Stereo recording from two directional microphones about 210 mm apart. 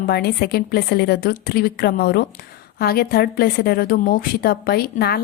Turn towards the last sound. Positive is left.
turn(degrees=50)  # may be behind; listen again after turning